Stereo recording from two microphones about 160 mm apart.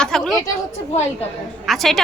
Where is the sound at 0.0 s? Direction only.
Centre (ahead or behind).